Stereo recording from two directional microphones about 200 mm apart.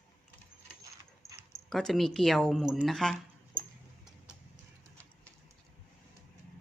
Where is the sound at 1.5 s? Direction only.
Centre (ahead or behind).